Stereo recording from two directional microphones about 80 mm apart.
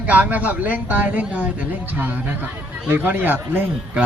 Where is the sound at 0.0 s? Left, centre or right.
Centre.